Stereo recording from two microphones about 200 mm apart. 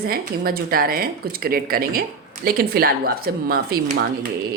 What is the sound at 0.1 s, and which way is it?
Speech, 50° right (ahead or behind).